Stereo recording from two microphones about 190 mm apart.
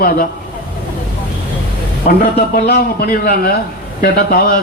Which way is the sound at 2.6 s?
55° left (ahead or behind).